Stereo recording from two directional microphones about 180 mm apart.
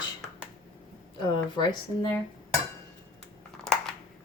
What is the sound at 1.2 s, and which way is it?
Speech, 25° left (ahead or behind).